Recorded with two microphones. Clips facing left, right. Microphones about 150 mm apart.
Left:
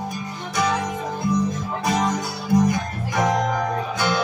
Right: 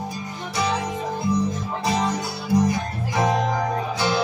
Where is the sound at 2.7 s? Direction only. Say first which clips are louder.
Left 1 dB; 30° right (ahead or behind).